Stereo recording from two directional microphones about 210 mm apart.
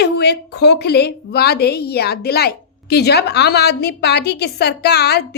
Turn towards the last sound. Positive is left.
turn(degrees=50)  # may be behind; listen again after turning